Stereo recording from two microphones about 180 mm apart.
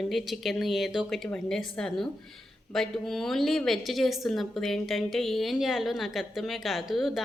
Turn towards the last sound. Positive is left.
turn(degrees=0)  # may be behind; listen again after turning